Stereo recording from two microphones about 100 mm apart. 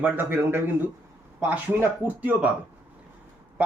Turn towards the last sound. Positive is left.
turn(degrees=-10)  # may be behind; listen again after turning